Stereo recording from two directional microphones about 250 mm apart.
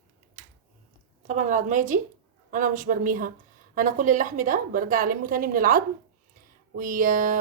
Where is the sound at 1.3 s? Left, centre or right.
Right.